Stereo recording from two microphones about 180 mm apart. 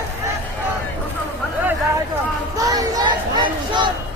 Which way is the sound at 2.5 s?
20° right (ahead or behind).